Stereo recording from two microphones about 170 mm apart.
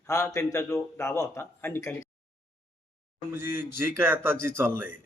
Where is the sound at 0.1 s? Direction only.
20° left (ahead or behind).